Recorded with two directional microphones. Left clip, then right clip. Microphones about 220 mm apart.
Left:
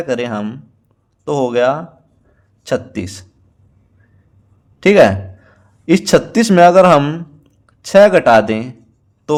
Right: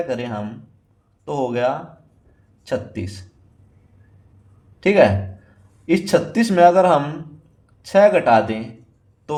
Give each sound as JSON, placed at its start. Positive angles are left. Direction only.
{"t": 0.1, "sound": "speech", "side_deg": 35}
{"t": 4.8, "sound": "speech", "side_deg": 35}